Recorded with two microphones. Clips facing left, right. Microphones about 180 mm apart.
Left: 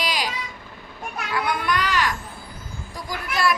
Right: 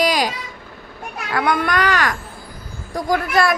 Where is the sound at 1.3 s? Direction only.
60° right (ahead or behind).